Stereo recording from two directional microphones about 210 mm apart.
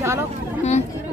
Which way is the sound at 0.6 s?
35° left (ahead or behind).